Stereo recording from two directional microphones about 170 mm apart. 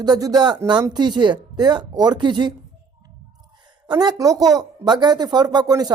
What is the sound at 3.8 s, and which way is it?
Speech, 25° right (ahead or behind).